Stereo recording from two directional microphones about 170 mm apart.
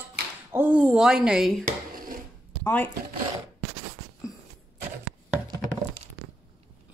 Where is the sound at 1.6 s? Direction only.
55° right (ahead or behind).